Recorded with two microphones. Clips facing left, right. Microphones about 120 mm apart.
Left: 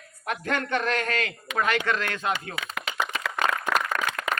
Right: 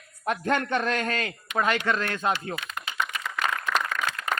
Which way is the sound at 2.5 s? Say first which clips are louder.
Left 1 dB; 90° left.